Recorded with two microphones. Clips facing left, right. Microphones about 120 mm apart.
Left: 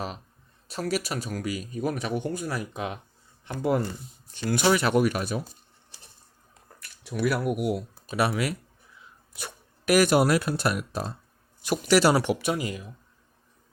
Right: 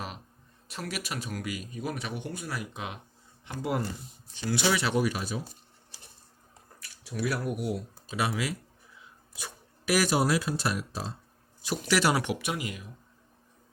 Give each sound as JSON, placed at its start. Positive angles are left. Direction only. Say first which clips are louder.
{"t": 0.7, "sound": "speech", "louder": "left 7 dB", "side_deg": 35}
{"t": 6.7, "sound": "a sound", "louder": "left 2 dB", "side_deg": 60}
{"t": 7.2, "sound": "speech", "louder": "left 5 dB", "side_deg": 65}
{"t": 11.9, "sound": "speech", "louder": "left 6 dB", "side_deg": 35}